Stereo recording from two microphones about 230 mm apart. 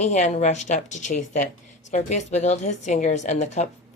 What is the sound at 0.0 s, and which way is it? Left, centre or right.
Speech, left.